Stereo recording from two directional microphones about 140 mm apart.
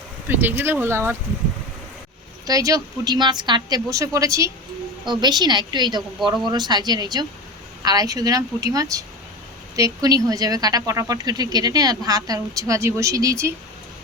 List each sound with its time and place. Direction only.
0.3 s speech: 15° right (ahead or behind)
2.5 s a woman's voice: 25° right (ahead or behind)